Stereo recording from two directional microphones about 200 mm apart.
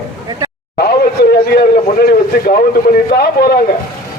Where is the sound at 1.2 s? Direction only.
50° left (ahead or behind).